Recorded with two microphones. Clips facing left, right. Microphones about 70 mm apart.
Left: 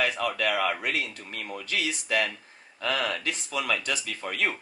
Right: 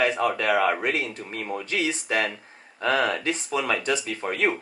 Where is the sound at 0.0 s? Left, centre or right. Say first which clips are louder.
Right 4 dB; right.